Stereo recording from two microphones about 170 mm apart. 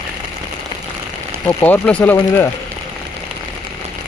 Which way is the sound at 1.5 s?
10° left (ahead or behind).